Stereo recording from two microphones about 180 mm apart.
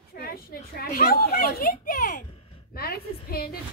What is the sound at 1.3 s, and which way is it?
A woman's voice, 60° left (ahead or behind).